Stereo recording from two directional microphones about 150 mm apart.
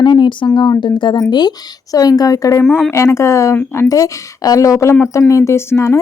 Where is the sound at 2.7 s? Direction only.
5° left (ahead or behind).